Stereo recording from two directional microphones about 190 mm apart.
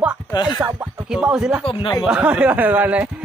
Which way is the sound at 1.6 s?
30° left (ahead or behind).